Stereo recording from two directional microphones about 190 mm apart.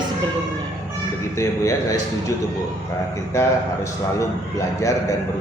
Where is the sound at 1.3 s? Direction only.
15° left (ahead or behind).